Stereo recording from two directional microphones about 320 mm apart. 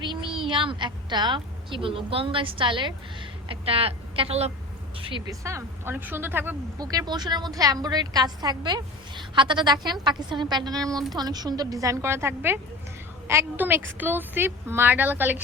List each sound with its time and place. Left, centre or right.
0.0 s a woman's voice: centre